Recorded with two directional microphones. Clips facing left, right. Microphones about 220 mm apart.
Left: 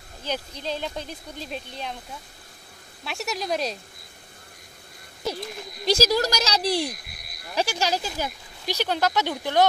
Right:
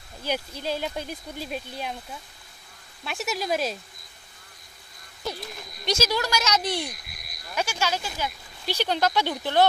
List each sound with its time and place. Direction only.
0.2 s speech: 10° right (ahead or behind)
3.1 s speech: centre (ahead or behind)
5.9 s speech: 35° left (ahead or behind)
8.6 s speech: 10° left (ahead or behind)